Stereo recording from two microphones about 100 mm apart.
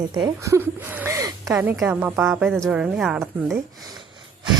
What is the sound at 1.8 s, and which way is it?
Speech, 15° right (ahead or behind).